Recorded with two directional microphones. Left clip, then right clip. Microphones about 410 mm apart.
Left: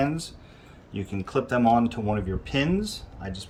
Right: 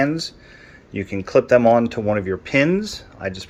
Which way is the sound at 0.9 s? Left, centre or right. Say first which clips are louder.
Right 11 dB; left.